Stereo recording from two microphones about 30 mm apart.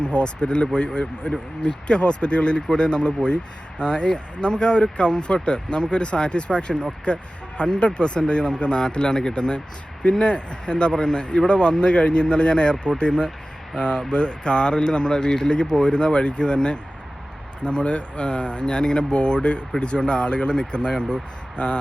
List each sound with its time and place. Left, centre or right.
0.1 s speech: left